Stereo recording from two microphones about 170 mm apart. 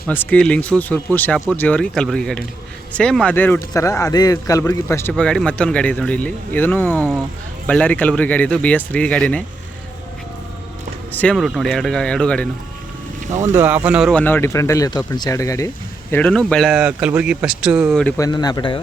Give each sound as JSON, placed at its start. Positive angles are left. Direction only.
{"t": 0.1, "sound": "speech", "side_deg": 5}
{"t": 5.1, "sound": "speech", "side_deg": 5}
{"t": 11.1, "sound": "speech", "side_deg": 10}
{"t": 11.3, "sound": "speech", "side_deg": 0}
{"t": 13.2, "sound": "speech", "side_deg": -45}
{"t": 13.5, "sound": "speech", "side_deg": -10}
{"t": 14.1, "sound": "speech", "side_deg": 10}
{"t": 16.1, "sound": "speech", "side_deg": 5}
{"t": 18.2, "sound": "speech", "side_deg": 25}